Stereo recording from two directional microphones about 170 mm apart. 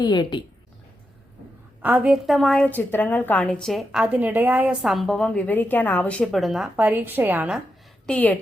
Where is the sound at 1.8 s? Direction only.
10° right (ahead or behind).